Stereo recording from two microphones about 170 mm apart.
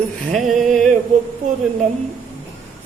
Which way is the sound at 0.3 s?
Centre (ahead or behind).